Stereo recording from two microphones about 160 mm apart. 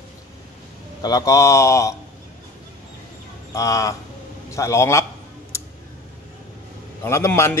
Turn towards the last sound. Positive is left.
turn(degrees=15)  # may be behind; listen again after turning